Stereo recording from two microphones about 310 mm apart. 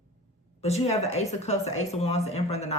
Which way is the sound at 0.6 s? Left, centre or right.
Left.